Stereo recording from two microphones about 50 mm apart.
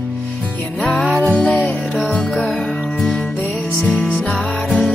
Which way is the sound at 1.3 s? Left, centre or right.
Left.